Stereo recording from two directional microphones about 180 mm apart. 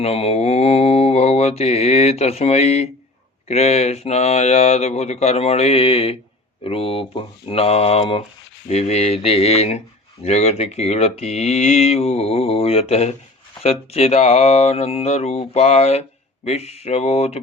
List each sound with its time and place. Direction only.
0.0 s mantra: 35° left (ahead or behind)
3.5 s speech: 35° left (ahead or behind)